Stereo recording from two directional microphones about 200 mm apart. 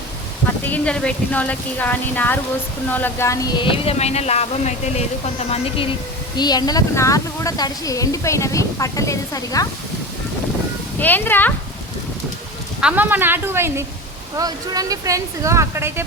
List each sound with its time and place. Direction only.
0.6 s speech: 5° left (ahead or behind)
11.0 s speech: 10° left (ahead or behind)
12.8 s speech: 10° right (ahead or behind)